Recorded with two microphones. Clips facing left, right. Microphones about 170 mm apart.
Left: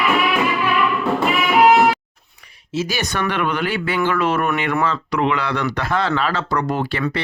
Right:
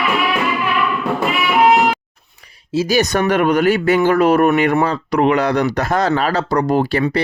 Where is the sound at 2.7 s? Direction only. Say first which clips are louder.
Right 7 dB; 40° right (ahead or behind).